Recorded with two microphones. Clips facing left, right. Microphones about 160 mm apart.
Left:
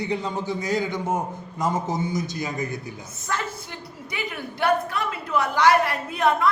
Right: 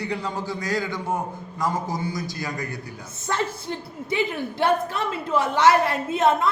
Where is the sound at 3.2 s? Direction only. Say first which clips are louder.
Right 4 dB; 30° right (ahead or behind).